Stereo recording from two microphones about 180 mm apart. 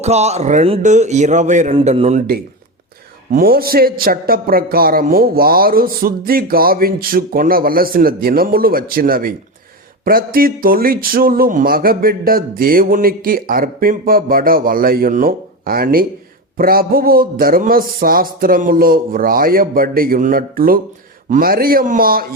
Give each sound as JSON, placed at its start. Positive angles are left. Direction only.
{"t": 0.0, "sound": "speech", "side_deg": -35}
{"t": 3.3, "sound": "a man's voice", "side_deg": -55}